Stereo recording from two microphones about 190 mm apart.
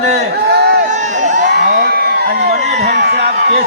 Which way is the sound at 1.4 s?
65° right (ahead or behind).